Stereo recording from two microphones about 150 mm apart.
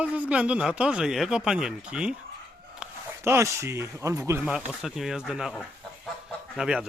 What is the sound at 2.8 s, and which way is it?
A man's voice, 15° right (ahead or behind).